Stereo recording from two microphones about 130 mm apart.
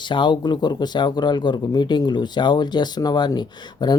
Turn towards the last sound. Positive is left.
turn(degrees=35)  # may be behind; listen again after turning